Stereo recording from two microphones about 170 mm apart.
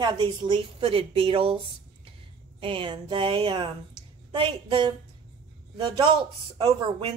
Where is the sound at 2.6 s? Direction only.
30° right (ahead or behind).